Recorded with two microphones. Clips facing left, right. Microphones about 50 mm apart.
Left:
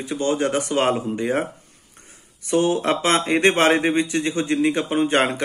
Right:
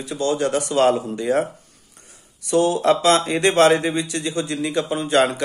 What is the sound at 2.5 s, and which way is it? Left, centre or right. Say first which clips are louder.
Speech: right 2 dB; left.